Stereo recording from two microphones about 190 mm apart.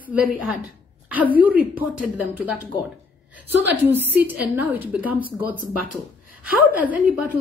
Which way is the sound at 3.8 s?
10° right (ahead or behind).